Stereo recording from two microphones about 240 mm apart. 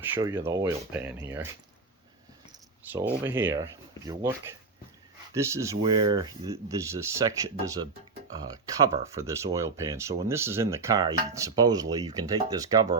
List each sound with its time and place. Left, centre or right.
0.1 s speech: centre
2.9 s speech: centre